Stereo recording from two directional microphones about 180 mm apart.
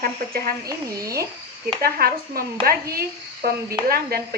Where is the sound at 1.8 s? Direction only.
55° right (ahead or behind).